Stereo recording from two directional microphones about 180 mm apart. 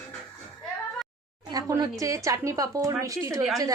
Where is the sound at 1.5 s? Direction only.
20° right (ahead or behind).